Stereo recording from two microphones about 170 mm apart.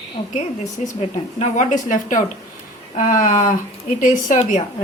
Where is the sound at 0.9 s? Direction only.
45° left (ahead or behind).